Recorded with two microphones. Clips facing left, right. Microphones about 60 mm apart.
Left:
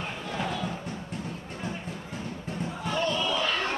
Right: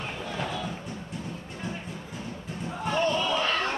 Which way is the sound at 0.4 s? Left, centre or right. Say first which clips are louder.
Left 2 dB; centre.